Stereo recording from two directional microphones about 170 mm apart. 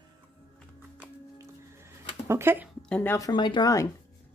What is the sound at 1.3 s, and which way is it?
Music, 15° right (ahead or behind).